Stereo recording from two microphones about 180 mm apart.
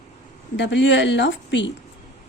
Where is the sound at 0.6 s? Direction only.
80° left.